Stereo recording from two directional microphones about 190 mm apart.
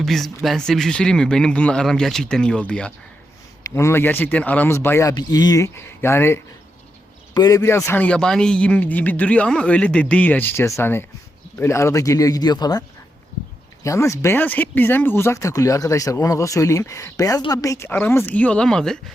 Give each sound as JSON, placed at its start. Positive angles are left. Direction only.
{"t": 0.0, "sound": "speech", "side_deg": 0}
{"t": 13.8, "sound": "speech", "side_deg": 15}